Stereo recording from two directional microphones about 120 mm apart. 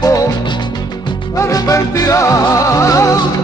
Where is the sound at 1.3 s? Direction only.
25° left (ahead or behind).